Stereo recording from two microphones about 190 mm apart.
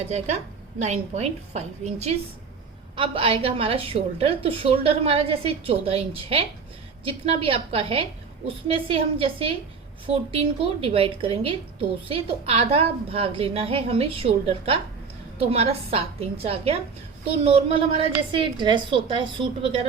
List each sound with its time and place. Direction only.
0.0 s a woman's voice: 35° right (ahead or behind)